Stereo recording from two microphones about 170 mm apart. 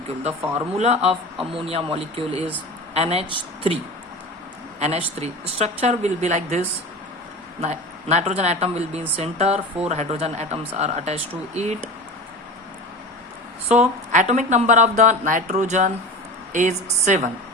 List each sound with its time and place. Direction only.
0.4 s speech: 40° right (ahead or behind)
4.8 s speech: 40° right (ahead or behind)
7.6 s speech: 40° right (ahead or behind)
13.7 s speech: 45° right (ahead or behind)